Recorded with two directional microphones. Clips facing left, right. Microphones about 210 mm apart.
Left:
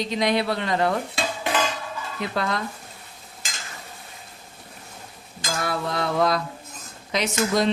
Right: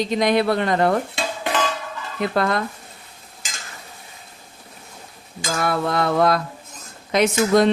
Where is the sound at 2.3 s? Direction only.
55° right (ahead or behind).